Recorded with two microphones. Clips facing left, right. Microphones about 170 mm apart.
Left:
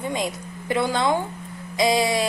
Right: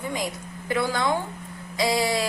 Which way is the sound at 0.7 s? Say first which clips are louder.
Left 3 dB; 20° left (ahead or behind).